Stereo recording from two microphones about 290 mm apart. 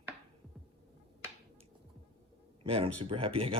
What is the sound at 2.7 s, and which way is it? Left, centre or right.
Speech, centre.